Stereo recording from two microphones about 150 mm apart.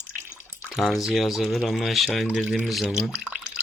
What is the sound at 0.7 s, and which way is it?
Speech, centre (ahead or behind).